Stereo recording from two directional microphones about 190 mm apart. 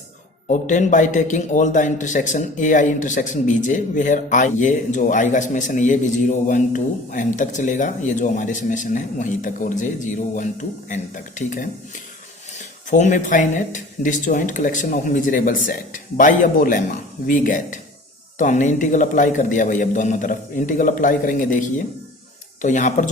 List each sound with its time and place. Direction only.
0.4 s a man's voice: 40° left (ahead or behind)
22.6 s a man's voice: 40° left (ahead or behind)